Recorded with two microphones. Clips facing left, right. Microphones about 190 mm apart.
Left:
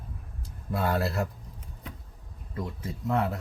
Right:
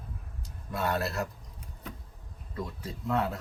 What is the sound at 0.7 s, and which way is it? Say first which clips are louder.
Speech: left 3 dB; 25° left (ahead or behind).